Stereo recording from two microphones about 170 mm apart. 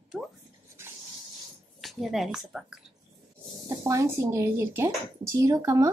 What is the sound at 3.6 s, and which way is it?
Speech, 20° right (ahead or behind).